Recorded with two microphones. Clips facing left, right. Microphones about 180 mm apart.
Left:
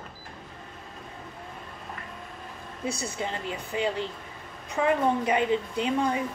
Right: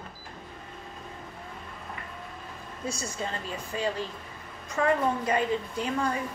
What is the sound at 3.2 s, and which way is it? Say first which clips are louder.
A woman's voice: left 2 dB; 20° left (ahead or behind).